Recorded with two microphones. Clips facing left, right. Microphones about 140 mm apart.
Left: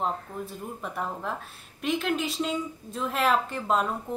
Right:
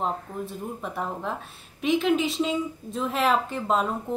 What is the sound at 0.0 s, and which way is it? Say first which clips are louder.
A woman's voice: right 1 dB; centre (ahead or behind).